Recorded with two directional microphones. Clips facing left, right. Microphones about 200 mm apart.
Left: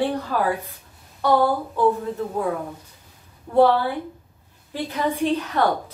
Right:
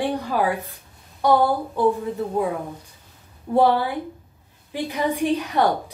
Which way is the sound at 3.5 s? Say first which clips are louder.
Left 1 dB; 15° right (ahead or behind).